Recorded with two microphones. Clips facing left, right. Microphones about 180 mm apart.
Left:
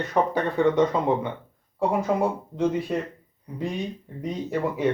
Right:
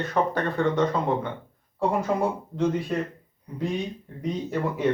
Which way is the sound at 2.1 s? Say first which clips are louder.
Left 2 dB; centre (ahead or behind).